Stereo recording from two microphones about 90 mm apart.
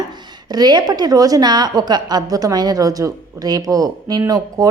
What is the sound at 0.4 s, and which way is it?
A woman's voice, 50° right (ahead or behind).